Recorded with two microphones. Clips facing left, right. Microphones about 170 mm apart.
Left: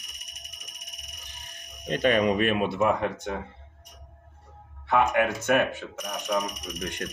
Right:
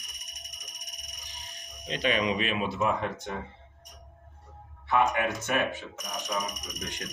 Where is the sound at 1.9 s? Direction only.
50° left (ahead or behind).